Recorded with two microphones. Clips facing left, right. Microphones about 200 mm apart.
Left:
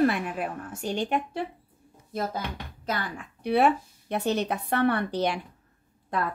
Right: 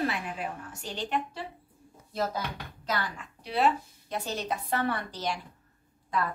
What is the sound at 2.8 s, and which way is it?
A woman's voice, 55° left (ahead or behind).